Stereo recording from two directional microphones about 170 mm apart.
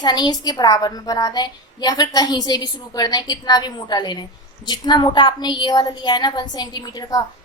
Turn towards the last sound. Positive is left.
turn(degrees=25)  # may be behind; listen again after turning